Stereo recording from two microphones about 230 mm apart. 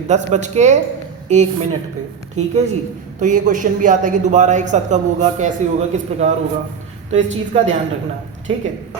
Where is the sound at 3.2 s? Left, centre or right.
Right.